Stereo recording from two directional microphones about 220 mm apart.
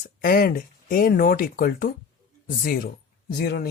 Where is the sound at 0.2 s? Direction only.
40° left (ahead or behind).